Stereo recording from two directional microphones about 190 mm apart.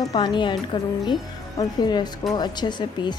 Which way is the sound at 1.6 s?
20° left (ahead or behind).